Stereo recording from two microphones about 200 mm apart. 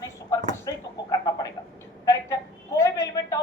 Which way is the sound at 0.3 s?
15° left (ahead or behind).